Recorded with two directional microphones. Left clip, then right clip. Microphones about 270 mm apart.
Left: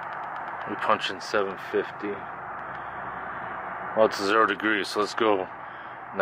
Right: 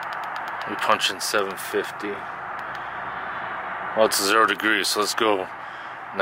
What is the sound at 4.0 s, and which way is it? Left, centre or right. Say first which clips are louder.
Speech: right 3 dB; centre.